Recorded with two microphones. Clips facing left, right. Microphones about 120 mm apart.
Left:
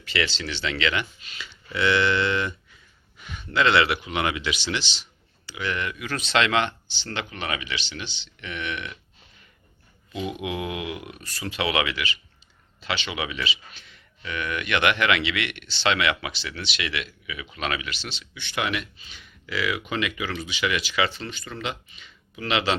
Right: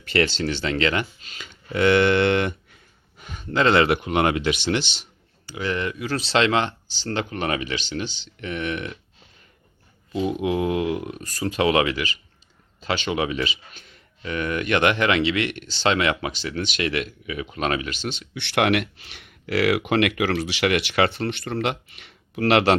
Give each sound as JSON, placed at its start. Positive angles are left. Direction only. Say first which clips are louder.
{"t": 0.0, "sound": "speech", "louder": "right 6 dB", "side_deg": -50}
{"t": 3.2, "sound": "speech", "louder": "right 2 dB", "side_deg": -40}
{"t": 5.5, "sound": "speech", "louder": "right 3 dB", "side_deg": -35}
{"t": 10.1, "sound": "speech", "louder": "right 7 dB", "side_deg": -35}
{"t": 18.3, "sound": "speech", "louder": "right 8 dB", "side_deg": -70}